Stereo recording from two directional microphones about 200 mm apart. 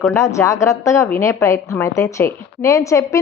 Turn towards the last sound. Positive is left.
turn(degrees=15)  # may be behind; listen again after turning